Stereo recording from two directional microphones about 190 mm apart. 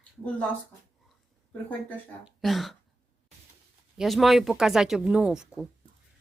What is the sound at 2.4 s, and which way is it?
Speech, centre (ahead or behind).